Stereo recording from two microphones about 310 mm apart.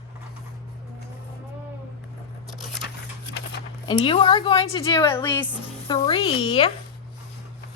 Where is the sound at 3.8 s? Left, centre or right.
Centre.